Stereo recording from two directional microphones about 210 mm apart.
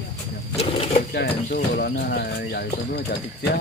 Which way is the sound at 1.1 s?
45° left (ahead or behind).